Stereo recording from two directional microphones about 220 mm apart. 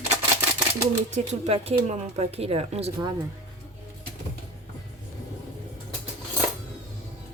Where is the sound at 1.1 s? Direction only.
30° right (ahead or behind).